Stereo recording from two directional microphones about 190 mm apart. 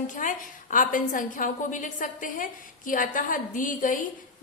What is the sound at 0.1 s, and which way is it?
A woman's voice, 45° left (ahead or behind).